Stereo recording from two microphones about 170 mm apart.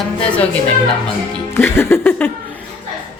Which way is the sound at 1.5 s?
15° left (ahead or behind).